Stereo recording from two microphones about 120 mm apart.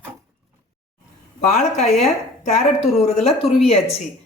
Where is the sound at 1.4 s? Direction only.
65° left (ahead or behind).